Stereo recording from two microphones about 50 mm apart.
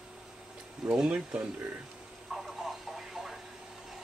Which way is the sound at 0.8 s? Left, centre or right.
Centre.